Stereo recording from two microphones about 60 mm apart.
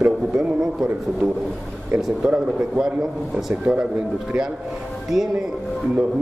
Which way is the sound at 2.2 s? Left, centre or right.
Centre.